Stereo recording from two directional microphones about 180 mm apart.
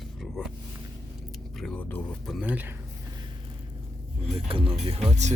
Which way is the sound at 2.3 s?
5° right (ahead or behind).